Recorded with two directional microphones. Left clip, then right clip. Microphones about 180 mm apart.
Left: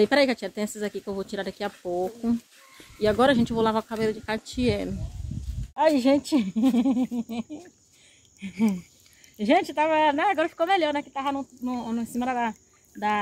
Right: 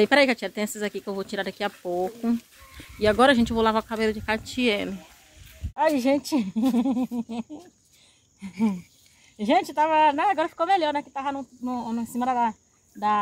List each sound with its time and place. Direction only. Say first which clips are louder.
0.0 s speech: right 2 dB; 10° right (ahead or behind)
5.8 s speech: left 1 dB; 20° right (ahead or behind)
9.4 s speech: even; 30° right (ahead or behind)